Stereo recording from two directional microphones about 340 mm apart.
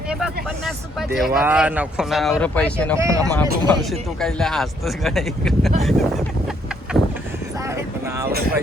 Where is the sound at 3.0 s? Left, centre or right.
Centre.